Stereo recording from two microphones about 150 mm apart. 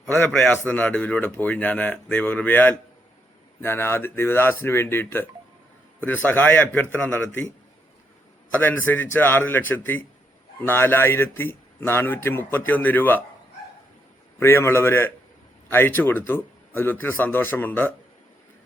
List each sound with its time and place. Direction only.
0.0 s a man's voice: centre (ahead or behind)
8.5 s speech: 10° left (ahead or behind)
14.3 s speech: 15° left (ahead or behind)